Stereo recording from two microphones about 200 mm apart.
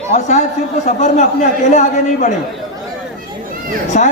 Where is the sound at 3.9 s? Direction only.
40° left (ahead or behind).